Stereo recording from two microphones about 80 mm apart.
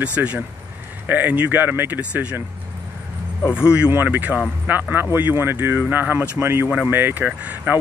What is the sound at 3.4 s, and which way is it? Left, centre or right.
Speech, left.